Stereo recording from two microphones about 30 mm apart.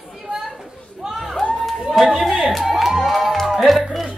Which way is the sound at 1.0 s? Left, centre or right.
Centre.